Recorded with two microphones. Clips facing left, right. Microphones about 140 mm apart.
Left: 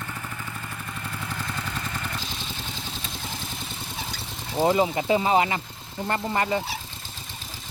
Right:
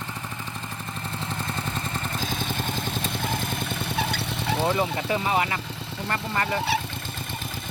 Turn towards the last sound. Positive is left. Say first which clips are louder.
# left 2 dB
turn(degrees=20)  # may be behind; listen again after turning